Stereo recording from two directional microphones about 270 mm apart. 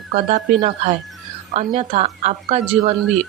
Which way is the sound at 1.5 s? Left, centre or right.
Right.